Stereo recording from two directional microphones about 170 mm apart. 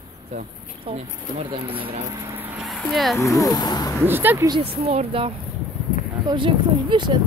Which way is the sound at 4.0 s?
10° right (ahead or behind).